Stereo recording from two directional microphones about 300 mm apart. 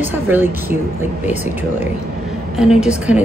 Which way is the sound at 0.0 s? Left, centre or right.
Centre.